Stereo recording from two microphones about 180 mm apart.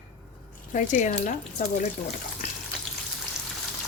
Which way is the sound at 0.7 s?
45° left (ahead or behind).